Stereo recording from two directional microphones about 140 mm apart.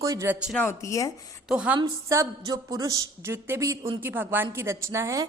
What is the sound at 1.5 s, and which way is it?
Speech, 5° right (ahead or behind).